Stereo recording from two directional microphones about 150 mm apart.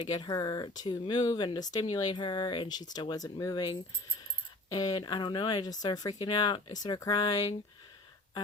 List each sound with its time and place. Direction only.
0.1 s speech: 30° left (ahead or behind)